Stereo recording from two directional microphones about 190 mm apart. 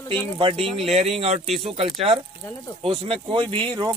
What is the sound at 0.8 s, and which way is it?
Speech, 35° right (ahead or behind).